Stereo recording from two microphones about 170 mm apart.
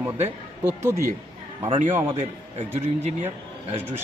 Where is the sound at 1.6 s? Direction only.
35° right (ahead or behind).